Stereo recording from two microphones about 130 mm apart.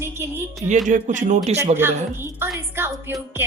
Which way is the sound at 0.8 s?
80° right.